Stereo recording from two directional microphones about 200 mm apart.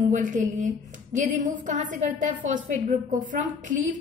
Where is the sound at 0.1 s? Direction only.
40° right (ahead or behind).